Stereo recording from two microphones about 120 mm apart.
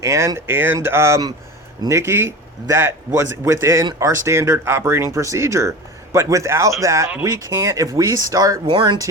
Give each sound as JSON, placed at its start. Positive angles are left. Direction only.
{"t": 0.0, "sound": "speech", "side_deg": -25}
{"t": 8.6, "sound": "speech", "side_deg": -45}